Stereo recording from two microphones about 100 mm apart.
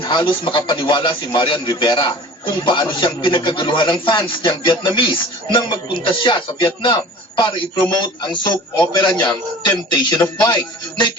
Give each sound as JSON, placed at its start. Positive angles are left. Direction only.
{"t": 0.0, "sound": "a man's voice", "side_deg": 55}